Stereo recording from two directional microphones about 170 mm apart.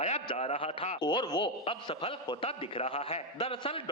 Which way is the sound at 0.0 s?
40° left (ahead or behind).